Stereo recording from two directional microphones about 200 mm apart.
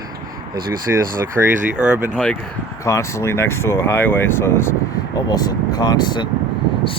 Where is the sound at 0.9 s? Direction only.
10° right (ahead or behind).